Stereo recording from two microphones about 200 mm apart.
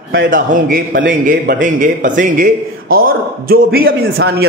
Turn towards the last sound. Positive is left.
turn(degrees=-50)  # may be behind; listen again after turning